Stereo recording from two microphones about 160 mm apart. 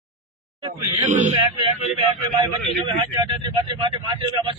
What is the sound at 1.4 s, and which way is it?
Speech, 30° right (ahead or behind).